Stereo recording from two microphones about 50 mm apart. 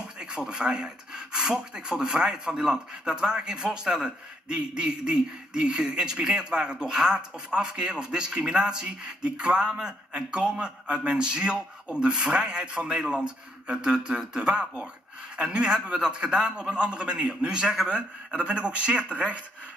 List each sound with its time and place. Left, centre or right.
0.2 s speech: centre